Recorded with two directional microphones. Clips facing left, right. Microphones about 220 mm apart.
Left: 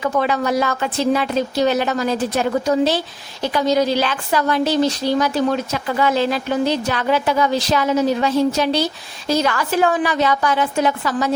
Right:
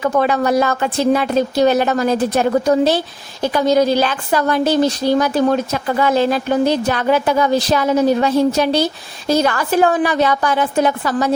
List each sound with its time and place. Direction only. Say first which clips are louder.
0.0 s a woman's voice: right 3 dB; 50° right (ahead or behind)